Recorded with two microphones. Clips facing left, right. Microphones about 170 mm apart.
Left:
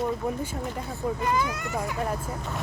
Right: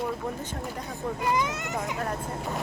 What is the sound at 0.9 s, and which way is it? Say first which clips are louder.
Speech: left 1 dB; 20° right (ahead or behind).